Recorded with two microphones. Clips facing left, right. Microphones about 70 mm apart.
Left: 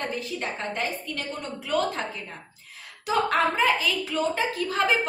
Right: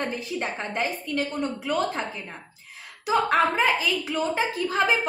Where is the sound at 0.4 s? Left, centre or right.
Right.